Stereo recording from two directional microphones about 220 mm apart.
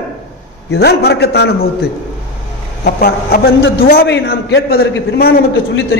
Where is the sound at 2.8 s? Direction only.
45° left (ahead or behind).